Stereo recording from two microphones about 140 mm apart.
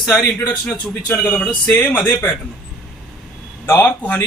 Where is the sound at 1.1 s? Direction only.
10° left (ahead or behind).